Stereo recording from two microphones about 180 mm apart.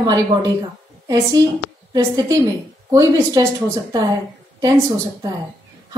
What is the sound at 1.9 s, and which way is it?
A woman's voice, 20° right (ahead or behind).